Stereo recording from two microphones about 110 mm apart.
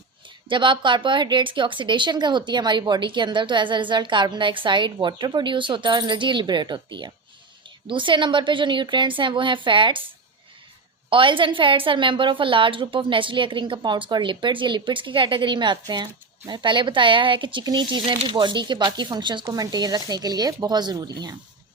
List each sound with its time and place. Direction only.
0.4 s a woman's voice: 45° right (ahead or behind)
11.1 s a woman's voice: 50° right (ahead or behind)